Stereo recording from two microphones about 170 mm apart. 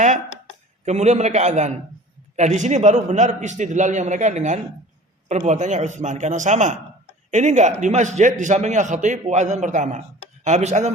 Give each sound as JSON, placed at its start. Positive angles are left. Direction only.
{"t": 0.9, "sound": "a man's voice", "side_deg": -40}